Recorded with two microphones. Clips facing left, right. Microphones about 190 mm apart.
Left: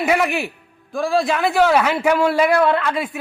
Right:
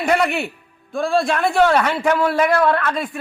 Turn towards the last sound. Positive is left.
turn(degrees=10)  # may be behind; listen again after turning